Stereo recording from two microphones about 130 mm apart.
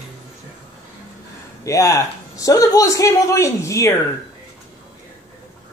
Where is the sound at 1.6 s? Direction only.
25° left (ahead or behind).